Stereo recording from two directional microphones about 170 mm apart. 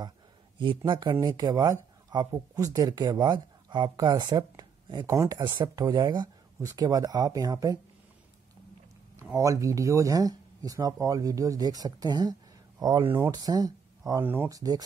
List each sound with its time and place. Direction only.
0.6 s speech: 25° right (ahead or behind)
9.1 s speech: 15° right (ahead or behind)